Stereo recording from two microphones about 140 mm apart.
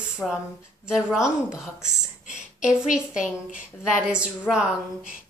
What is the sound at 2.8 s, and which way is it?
Speech, 5° right (ahead or behind).